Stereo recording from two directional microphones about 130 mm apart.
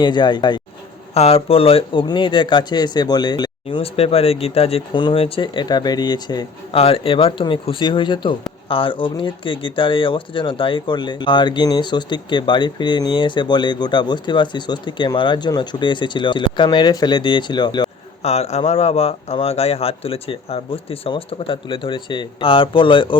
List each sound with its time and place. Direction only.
0.0 s speech: 35° left (ahead or behind)
1.1 s speech: 50° left (ahead or behind); by 3.8 s 30° left (ahead or behind)
3.8 s a man's voice: 50° left (ahead or behind); by 6.4 s 35° left (ahead or behind)
6.7 s speech: 45° left (ahead or behind)
18.2 s a man's voice: 55° left (ahead or behind)